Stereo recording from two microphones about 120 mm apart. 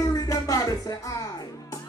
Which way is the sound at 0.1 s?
30° left (ahead or behind).